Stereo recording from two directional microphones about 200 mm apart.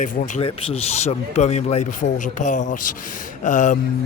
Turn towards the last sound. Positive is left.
turn(degrees=40)  # may be behind; listen again after turning